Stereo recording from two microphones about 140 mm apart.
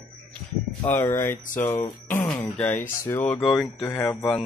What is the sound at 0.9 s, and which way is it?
Speech, 20° left (ahead or behind).